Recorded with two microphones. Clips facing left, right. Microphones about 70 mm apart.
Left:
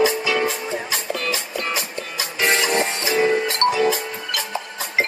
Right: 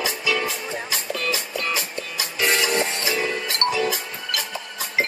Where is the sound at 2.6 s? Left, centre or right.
Left.